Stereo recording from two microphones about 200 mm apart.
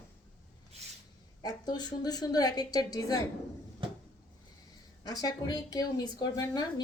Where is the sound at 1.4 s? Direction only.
20° left (ahead or behind).